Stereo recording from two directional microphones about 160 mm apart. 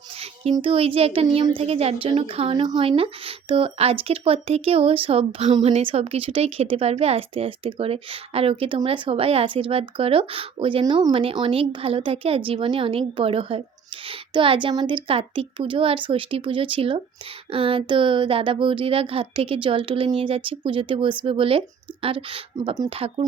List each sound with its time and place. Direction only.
0.5 s speech: 35° right (ahead or behind)